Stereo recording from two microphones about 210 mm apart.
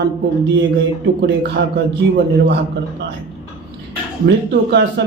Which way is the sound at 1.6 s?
60° right (ahead or behind).